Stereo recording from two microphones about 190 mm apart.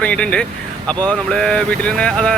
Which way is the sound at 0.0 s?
5° left (ahead or behind).